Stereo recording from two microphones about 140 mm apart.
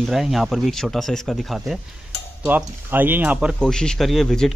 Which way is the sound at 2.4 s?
15° right (ahead or behind).